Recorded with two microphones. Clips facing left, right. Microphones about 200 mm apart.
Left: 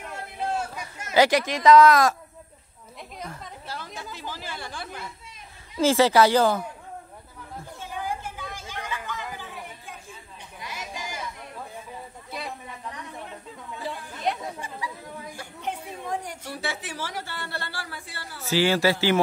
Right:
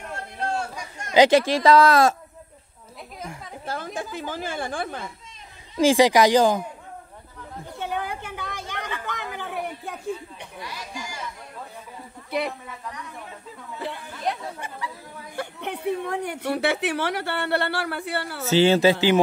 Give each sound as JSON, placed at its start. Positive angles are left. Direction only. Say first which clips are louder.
{"t": 0.1, "sound": "a sound", "louder": "right 1 dB", "side_deg": 5}
{"t": 1.1, "sound": "speech", "louder": "right 4 dB", "side_deg": -20}
{"t": 1.4, "sound": "speech", "louder": "left 1 dB", "side_deg": -30}
{"t": 3.6, "sound": "a woman's voice", "louder": "right 8 dB", "side_deg": -50}
{"t": 5.8, "sound": "speech", "louder": "right 2 dB", "side_deg": -15}
{"t": 7.8, "sound": "chatter", "louder": "right 3 dB", "side_deg": -65}
{"t": 10.6, "sound": "chatter", "louder": "even", "side_deg": 20}
{"t": 12.3, "sound": "speech", "louder": "right 9 dB", "side_deg": -65}
{"t": 13.8, "sound": "chatter", "louder": "even", "side_deg": 0}
{"t": 15.3, "sound": "a woman's voice", "louder": "right 5 dB", "side_deg": -65}
{"t": 18.4, "sound": "speech", "louder": "right 4 dB", "side_deg": -25}